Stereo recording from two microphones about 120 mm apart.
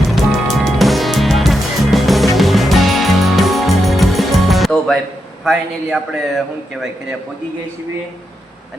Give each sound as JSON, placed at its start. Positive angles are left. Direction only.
{"t": 0.3, "sound": "music", "side_deg": 0}
{"t": 5.5, "sound": "a man's voice", "side_deg": -5}